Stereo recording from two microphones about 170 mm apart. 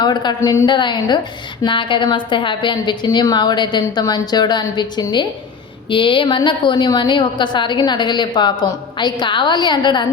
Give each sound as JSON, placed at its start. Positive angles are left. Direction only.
{"t": 0.0, "sound": "a woman's voice", "side_deg": 25}